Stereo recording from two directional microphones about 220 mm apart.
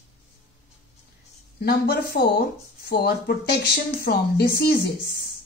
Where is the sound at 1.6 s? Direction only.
45° left (ahead or behind).